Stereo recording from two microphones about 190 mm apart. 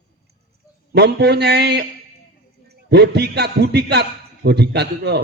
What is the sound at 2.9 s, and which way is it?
A man's voice, 60° right (ahead or behind).